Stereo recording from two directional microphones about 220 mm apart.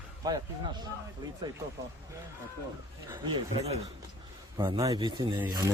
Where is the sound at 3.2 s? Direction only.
25° right (ahead or behind).